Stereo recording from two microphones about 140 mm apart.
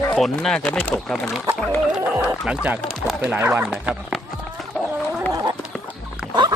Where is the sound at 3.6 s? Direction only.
5° right (ahead or behind).